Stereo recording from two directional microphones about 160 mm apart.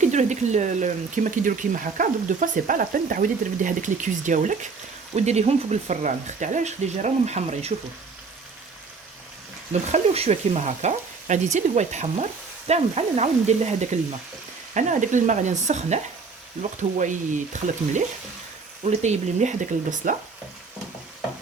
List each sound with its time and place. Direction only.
0.0 s speech: 45° right (ahead or behind)
9.7 s speech: 40° right (ahead or behind)
17.0 s speech: 50° right (ahead or behind)